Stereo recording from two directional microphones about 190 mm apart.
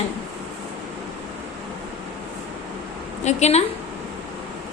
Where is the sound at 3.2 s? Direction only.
35° left (ahead or behind).